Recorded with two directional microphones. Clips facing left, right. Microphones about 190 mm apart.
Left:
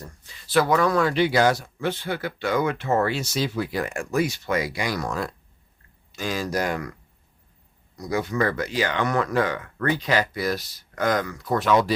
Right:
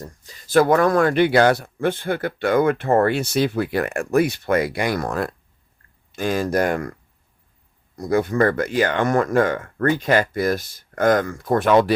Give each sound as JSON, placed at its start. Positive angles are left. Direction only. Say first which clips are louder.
{"t": 0.0, "sound": "speech", "louder": "right 5 dB", "side_deg": -40}
{"t": 7.9, "sound": "speech", "louder": "right 6 dB", "side_deg": -55}